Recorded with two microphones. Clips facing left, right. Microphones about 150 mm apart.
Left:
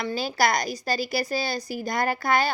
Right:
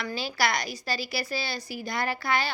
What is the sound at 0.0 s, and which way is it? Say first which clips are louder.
A woman's voice: left 4 dB; 40° left (ahead or behind).